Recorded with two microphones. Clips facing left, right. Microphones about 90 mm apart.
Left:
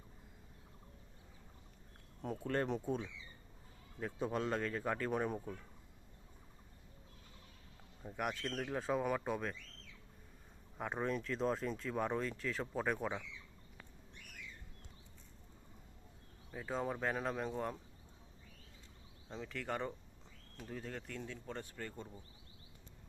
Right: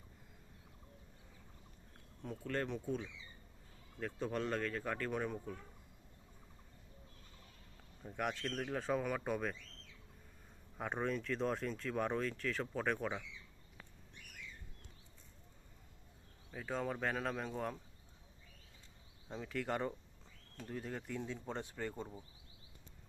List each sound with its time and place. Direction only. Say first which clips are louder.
2.3 s speech: left 3 dB; 25° left (ahead or behind)
2.6 s speech: left 2 dB; 40° left (ahead or behind)
4.0 s speech: left 1 dB; 10° left (ahead or behind)
8.0 s speech: even; 5° left (ahead or behind)
10.8 s speech: even; centre (ahead or behind)
16.5 s speech: even; 5° left (ahead or behind)
19.3 s speech: right 2 dB; 5° right (ahead or behind)
21.2 s speech: right 3 dB; 15° right (ahead or behind)